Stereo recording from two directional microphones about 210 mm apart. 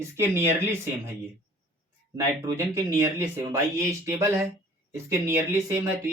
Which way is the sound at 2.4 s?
10° right (ahead or behind).